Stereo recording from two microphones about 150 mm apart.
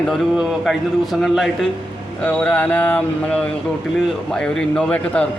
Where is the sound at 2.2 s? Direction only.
10° left (ahead or behind).